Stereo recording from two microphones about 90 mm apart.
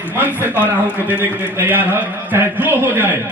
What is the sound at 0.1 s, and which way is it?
A man's voice, 20° right (ahead or behind).